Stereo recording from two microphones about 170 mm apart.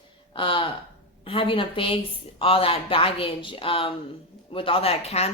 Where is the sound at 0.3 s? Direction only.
30° left (ahead or behind).